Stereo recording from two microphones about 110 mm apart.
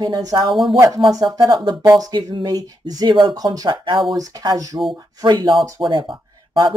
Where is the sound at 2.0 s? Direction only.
35° right (ahead or behind).